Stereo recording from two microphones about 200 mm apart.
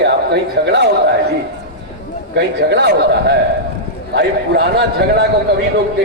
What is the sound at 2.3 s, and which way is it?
A man's voice, 60° right (ahead or behind).